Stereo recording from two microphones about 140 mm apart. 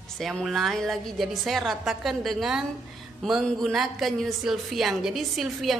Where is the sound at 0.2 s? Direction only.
Centre (ahead or behind).